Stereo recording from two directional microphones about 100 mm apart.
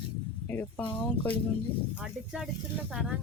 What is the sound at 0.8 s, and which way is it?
Speech, 15° left (ahead or behind).